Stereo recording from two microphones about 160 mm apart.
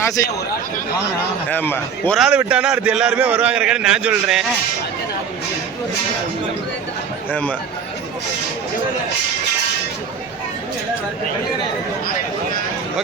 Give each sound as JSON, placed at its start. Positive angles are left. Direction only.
{"t": 0.2, "sound": "speech", "side_deg": 20}
{"t": 1.5, "sound": "a man's voice", "side_deg": 10}
{"t": 2.1, "sound": "a man's voice", "side_deg": -5}
{"t": 7.3, "sound": "a man's voice", "side_deg": 10}